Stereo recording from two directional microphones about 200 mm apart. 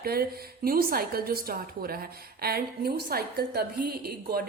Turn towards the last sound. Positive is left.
turn(degrees=-50)  # may be behind; listen again after turning